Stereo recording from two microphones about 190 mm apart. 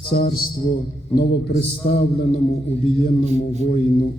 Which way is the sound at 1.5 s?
55° left (ahead or behind).